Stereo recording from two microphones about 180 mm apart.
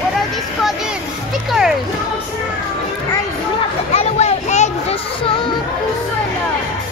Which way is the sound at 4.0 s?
40° left (ahead or behind).